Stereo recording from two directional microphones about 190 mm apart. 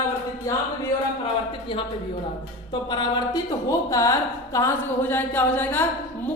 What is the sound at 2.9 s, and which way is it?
Mantra, 20° left (ahead or behind).